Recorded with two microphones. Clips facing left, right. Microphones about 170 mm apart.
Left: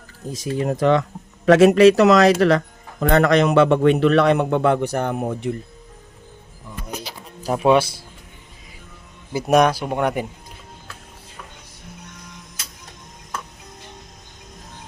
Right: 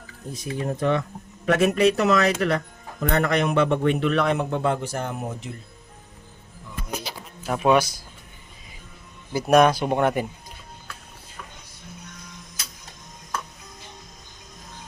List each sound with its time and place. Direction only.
0.3 s speech: 90° left; by 5.5 s 60° left (ahead or behind)
7.5 s a man's voice: 25° left (ahead or behind)
9.5 s speech: 15° left (ahead or behind)